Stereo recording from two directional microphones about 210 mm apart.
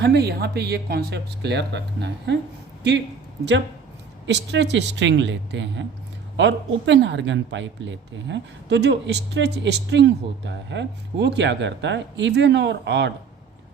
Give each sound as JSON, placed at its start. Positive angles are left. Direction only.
{"t": 0.0, "sound": "speech", "side_deg": -50}
{"t": 4.3, "sound": "speech", "side_deg": -55}